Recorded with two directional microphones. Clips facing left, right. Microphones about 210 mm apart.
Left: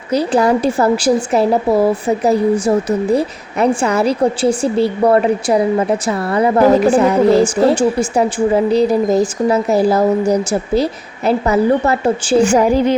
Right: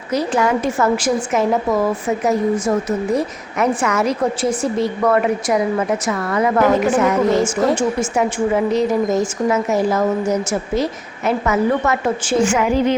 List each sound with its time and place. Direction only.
0.1 s a woman's voice: 35° left (ahead or behind)